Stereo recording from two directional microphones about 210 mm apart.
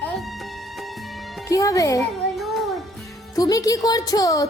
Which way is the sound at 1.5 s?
15° left (ahead or behind).